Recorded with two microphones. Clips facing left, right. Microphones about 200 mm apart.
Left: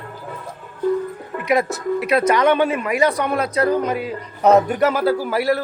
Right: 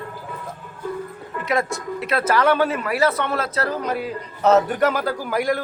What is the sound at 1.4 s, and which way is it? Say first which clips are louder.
A man's voice: left 4 dB; 20° left (ahead or behind).